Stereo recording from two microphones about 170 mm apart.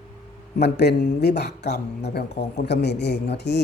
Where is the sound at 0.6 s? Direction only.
75° left (ahead or behind).